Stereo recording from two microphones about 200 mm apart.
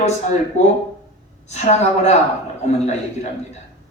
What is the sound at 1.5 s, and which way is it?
A woman's voice, 35° left (ahead or behind).